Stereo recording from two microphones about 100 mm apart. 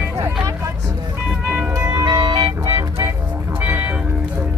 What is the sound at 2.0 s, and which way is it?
Music, 45° right (ahead or behind).